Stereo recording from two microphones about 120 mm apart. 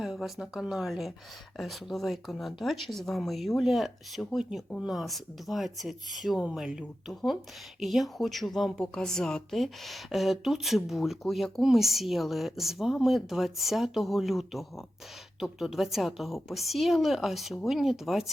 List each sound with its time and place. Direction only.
0.0 s speech: centre (ahead or behind)